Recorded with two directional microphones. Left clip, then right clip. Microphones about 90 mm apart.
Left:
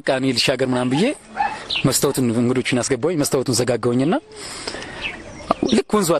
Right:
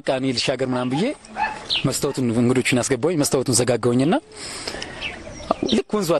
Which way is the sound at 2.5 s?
5° right (ahead or behind).